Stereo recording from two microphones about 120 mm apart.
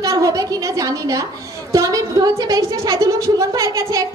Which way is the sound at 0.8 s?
30° right (ahead or behind).